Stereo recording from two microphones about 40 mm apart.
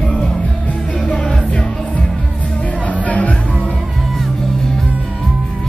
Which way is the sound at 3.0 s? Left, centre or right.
Left.